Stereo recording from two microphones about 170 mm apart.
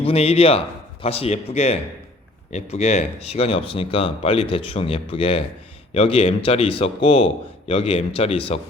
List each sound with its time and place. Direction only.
0.0 s speech: 35° left (ahead or behind)